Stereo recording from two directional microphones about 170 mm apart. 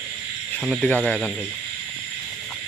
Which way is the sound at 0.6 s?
Centre (ahead or behind).